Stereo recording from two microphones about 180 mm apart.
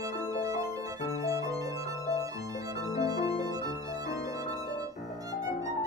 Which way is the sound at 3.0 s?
20° right (ahead or behind).